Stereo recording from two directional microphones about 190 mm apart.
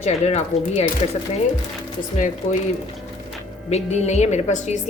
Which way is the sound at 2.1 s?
40° left (ahead or behind).